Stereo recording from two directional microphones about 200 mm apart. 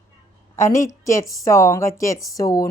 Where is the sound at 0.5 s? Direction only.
15° left (ahead or behind).